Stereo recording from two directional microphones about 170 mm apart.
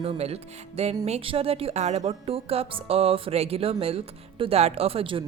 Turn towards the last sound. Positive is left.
turn(degrees=-30)  # may be behind; listen again after turning